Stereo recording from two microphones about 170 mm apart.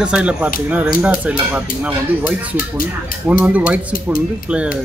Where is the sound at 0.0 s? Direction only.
5° right (ahead or behind).